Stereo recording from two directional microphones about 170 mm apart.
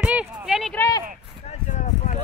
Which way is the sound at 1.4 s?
40° left (ahead or behind).